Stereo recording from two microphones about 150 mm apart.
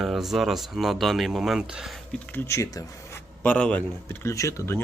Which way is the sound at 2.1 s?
15° left (ahead or behind).